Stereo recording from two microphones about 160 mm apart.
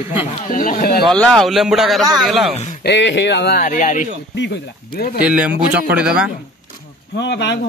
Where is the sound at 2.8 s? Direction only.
90° left.